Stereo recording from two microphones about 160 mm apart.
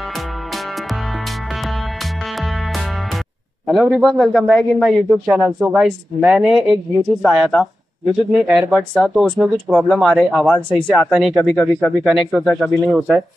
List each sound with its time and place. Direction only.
3.6 s speech: centre (ahead or behind)